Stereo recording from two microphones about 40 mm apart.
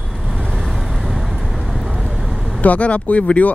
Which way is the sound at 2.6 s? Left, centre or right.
Left.